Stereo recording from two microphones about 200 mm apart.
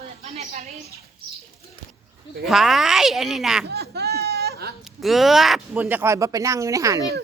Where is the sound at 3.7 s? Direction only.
55° right (ahead or behind).